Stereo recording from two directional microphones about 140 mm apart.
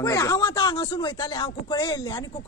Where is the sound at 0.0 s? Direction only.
25° left (ahead or behind).